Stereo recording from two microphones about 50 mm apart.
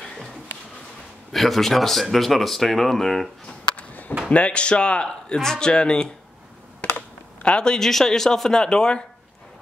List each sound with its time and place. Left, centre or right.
1.3 s speech: centre
3.7 s a sound: left
4.3 s speech: left
6.8 s computer keyboard: left
7.4 s speech: centre